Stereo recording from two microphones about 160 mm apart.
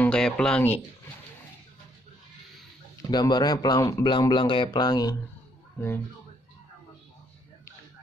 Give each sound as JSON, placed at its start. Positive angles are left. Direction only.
{"t": 0.0, "sound": "speech", "side_deg": 5}
{"t": 3.1, "sound": "speech", "side_deg": 25}